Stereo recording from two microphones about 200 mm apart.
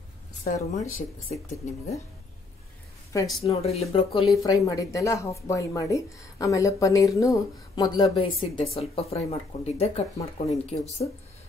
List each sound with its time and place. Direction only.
0.4 s speech: 45° left (ahead or behind)
3.4 s speech: 30° left (ahead or behind)
4.4 s speech: 15° left (ahead or behind); by 10.8 s 35° left (ahead or behind)